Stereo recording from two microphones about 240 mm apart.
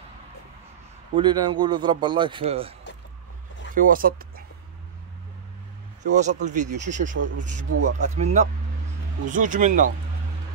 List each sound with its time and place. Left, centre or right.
1.1 s a man's voice: centre
3.7 s speech: right
6.1 s speech: right
7.2 s a man's voice: right
8.0 s a man's voice: right